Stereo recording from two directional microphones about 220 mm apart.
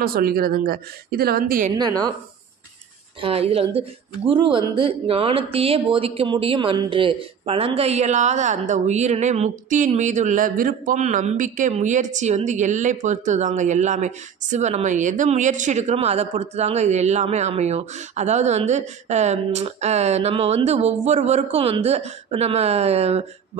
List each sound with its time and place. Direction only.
0.0 s a woman's voice: 40° right (ahead or behind)
1.8 s a woman's voice: 20° right (ahead or behind)
3.2 s speech: 25° right (ahead or behind)